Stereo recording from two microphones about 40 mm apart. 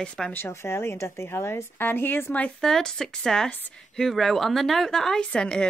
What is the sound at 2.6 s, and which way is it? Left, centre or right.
Speech, centre.